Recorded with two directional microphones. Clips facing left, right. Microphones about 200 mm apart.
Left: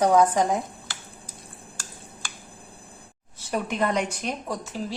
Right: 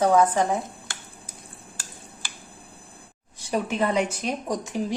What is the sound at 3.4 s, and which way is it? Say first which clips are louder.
A woman's voice: right 1 dB; 10° right (ahead or behind).